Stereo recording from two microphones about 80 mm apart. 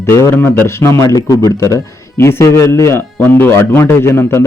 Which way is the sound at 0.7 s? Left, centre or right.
Left.